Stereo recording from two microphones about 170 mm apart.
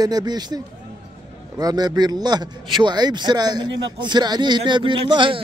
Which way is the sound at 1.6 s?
20° right (ahead or behind).